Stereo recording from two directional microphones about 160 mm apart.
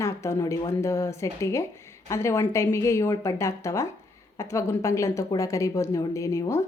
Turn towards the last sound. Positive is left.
turn(degrees=20)  # may be behind; listen again after turning